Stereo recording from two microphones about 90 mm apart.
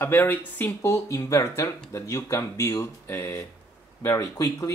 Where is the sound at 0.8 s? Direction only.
30° left (ahead or behind).